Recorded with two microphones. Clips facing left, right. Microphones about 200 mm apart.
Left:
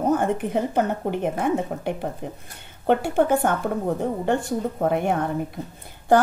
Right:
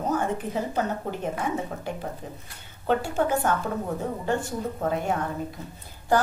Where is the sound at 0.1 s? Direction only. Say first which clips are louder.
Left 3 dB; 60° left (ahead or behind).